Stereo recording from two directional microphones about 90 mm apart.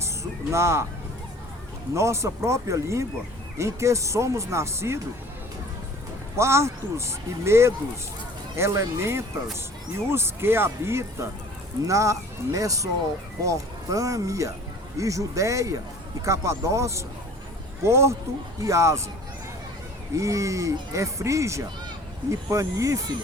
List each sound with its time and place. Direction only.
0.0 s music: 30° right (ahead or behind)
1.9 s speech: 35° right (ahead or behind)
6.3 s speech: 30° right (ahead or behind)
20.1 s speech: 35° right (ahead or behind)